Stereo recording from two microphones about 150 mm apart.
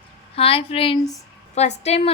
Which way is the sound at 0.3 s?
40° left (ahead or behind).